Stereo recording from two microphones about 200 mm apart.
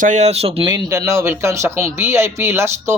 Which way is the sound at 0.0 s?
35° right (ahead or behind).